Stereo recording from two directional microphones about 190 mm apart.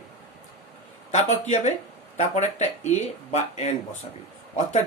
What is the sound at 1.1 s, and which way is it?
Speech, 40° left (ahead or behind).